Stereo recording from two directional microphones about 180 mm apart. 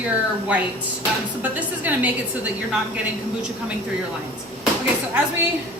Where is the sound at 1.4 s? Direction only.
10° right (ahead or behind).